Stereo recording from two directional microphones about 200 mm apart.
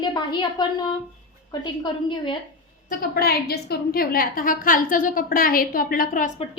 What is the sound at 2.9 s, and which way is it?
A woman's voice, 50° left (ahead or behind).